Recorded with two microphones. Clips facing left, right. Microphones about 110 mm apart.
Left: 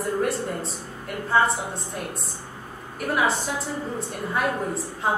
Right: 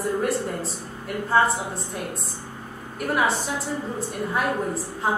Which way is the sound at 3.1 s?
Centre (ahead or behind).